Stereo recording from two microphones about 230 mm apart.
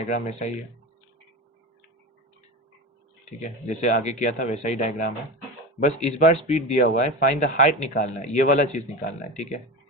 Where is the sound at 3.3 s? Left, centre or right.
Left.